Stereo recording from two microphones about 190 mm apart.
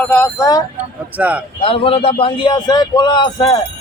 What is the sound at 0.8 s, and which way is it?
Speech, 10° right (ahead or behind).